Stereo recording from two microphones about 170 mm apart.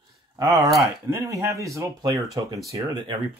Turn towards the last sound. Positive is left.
turn(degrees=-20)  # may be behind; listen again after turning